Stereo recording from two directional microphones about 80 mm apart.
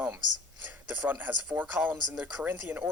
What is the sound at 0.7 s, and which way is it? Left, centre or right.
Speech, right.